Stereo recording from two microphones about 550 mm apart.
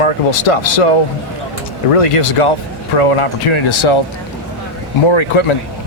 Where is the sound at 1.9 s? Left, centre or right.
Left.